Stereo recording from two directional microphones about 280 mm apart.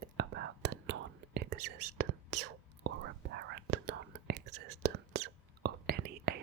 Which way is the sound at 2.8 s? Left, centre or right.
Right.